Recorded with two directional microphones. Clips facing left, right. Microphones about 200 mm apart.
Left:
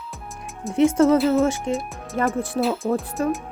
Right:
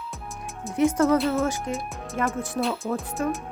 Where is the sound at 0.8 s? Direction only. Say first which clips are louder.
Left 4 dB; 25° left (ahead or behind).